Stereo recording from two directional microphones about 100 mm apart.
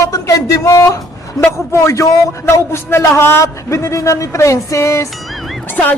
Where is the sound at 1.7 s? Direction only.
30° left (ahead or behind).